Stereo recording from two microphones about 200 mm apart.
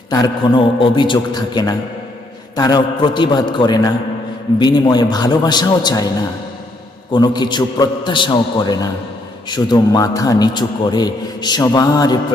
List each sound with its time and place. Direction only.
0.1 s a man's voice: 20° left (ahead or behind)
7.1 s a man's voice: 20° left (ahead or behind)